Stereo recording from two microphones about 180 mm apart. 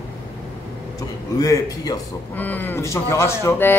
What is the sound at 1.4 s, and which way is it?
A man's voice, 20° left (ahead or behind).